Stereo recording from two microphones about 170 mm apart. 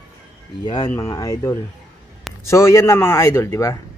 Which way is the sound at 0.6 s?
25° left (ahead or behind).